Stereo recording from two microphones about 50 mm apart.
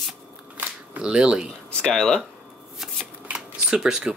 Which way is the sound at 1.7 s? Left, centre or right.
Centre.